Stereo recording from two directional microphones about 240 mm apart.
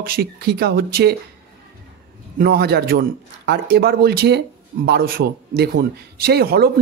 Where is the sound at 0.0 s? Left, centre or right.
Right.